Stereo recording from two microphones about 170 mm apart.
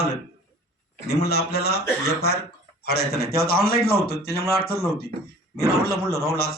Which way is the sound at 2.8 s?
70° left (ahead or behind).